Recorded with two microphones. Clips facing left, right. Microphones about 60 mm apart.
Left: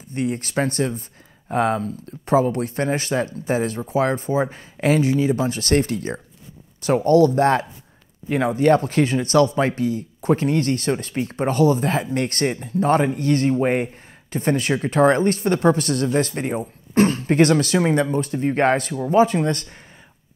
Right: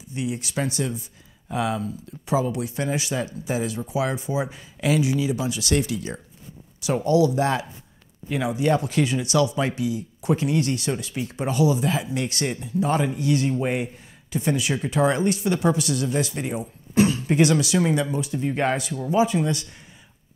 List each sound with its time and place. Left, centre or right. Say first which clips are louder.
0.1 s speech: left 5 dB; left
17.7 s speech: left 3 dB; left